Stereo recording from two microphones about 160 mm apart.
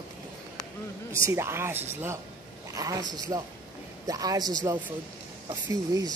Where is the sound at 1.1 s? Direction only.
20° right (ahead or behind).